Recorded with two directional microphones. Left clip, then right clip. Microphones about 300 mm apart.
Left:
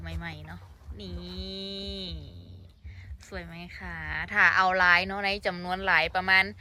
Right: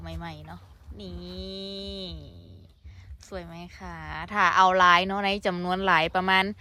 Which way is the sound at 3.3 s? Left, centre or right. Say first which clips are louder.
Right 1 dB; centre.